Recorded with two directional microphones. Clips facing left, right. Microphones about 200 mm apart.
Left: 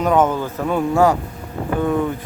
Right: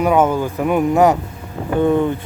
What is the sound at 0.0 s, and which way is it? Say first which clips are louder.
Speech: right 2 dB; 10° right (ahead or behind).